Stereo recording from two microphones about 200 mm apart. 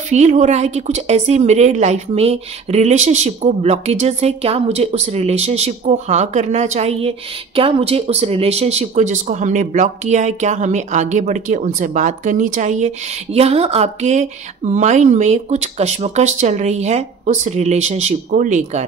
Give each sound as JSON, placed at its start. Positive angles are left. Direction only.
{"t": 0.1, "sound": "a woman's voice", "side_deg": -35}